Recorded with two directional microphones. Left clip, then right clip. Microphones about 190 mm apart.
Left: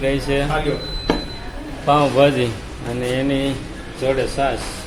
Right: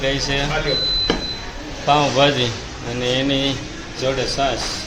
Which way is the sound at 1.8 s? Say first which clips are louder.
Left 1 dB; 10° left (ahead or behind).